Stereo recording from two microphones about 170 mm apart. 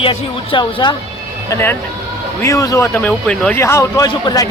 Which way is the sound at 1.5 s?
15° left (ahead or behind).